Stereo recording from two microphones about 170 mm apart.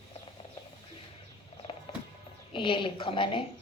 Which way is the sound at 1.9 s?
30° left (ahead or behind).